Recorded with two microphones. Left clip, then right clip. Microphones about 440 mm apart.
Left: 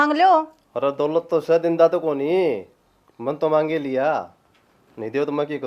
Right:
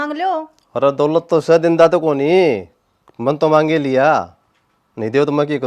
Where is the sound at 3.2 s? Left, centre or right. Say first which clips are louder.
Right 6 dB; right.